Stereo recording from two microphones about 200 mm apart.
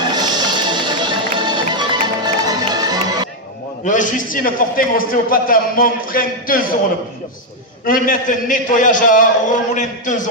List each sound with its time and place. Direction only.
0.1 s music: 20° right (ahead or behind)
3.8 s a man's voice: 40° left (ahead or behind)
7.9 s a man's voice: 45° left (ahead or behind)